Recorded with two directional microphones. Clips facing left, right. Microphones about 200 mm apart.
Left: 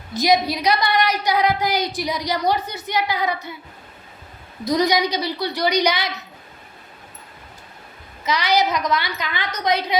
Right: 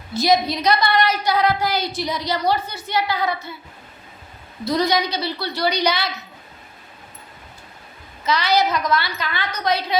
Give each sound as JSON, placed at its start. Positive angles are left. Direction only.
{"t": 0.1, "sound": "a woman's voice", "side_deg": 15}
{"t": 4.6, "sound": "a woman's voice", "side_deg": 15}
{"t": 8.2, "sound": "a woman's voice", "side_deg": 15}